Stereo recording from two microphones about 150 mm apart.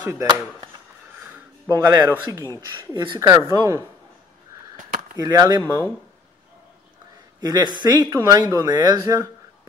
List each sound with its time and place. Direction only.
0.0 s speech: 15° right (ahead or behind)
1.7 s speech: 25° right (ahead or behind)
5.1 s speech: 25° right (ahead or behind)
7.4 s speech: 30° right (ahead or behind)